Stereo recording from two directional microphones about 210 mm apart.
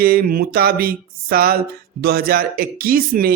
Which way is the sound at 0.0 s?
45° right (ahead or behind).